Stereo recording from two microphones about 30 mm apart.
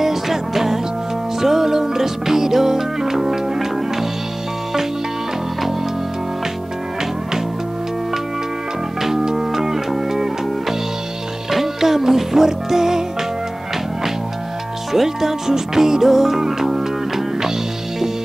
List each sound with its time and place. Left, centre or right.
0.0 s music: centre
9.0 s music: centre
11.5 s music: centre
14.9 s music: centre